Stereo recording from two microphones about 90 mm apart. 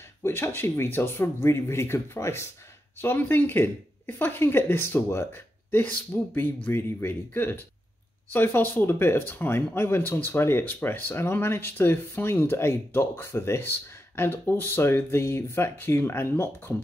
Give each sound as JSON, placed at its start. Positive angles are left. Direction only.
{"t": 0.2, "sound": "speech", "side_deg": 30}